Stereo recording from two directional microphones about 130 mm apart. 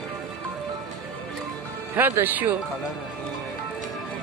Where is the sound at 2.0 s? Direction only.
15° right (ahead or behind).